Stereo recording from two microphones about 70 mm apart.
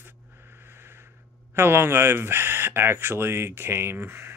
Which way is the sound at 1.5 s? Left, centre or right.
Right.